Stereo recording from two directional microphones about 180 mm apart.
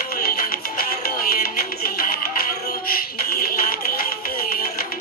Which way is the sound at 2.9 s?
55° left (ahead or behind).